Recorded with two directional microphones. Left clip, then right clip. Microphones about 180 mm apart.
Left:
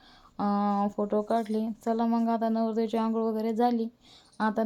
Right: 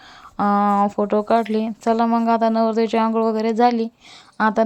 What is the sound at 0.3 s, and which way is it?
Speech, 25° right (ahead or behind).